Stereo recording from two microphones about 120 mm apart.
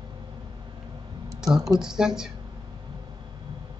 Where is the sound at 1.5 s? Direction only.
25° right (ahead or behind).